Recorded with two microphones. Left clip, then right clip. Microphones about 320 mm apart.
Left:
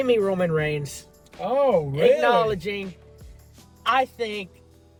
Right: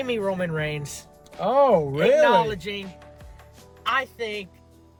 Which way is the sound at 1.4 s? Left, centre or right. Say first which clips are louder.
Right 2 dB; centre.